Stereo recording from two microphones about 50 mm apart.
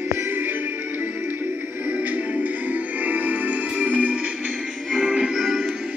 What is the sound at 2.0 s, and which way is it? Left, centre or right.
Music, right.